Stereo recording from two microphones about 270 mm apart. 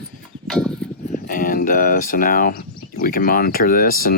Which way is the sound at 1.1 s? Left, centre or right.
Left.